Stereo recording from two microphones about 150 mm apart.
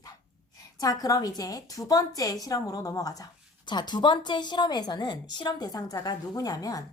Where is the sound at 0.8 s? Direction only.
25° left (ahead or behind).